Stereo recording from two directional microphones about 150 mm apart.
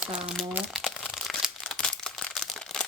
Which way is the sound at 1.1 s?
Centre (ahead or behind).